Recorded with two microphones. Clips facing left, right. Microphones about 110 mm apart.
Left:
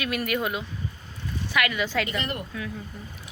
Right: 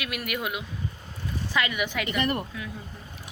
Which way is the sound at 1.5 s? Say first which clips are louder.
Left 3 dB; 20° right (ahead or behind).